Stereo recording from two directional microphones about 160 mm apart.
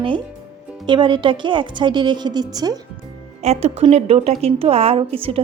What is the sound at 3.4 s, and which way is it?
A woman's voice, 40° right (ahead or behind).